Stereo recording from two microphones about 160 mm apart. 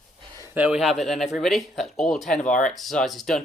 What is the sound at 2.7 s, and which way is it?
Speech, centre (ahead or behind).